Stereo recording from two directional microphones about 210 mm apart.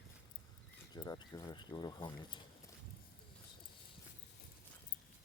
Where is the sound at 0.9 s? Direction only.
15° left (ahead or behind).